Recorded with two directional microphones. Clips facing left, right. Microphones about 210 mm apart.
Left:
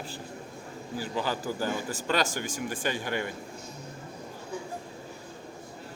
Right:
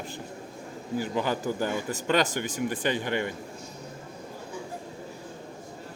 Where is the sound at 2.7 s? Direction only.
45° left (ahead or behind).